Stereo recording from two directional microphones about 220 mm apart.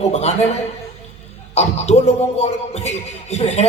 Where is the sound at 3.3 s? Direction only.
30° left (ahead or behind).